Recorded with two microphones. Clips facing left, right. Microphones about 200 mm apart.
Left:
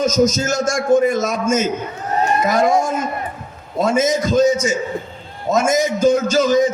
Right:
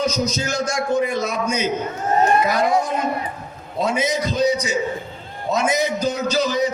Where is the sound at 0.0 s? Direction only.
45° left (ahead or behind).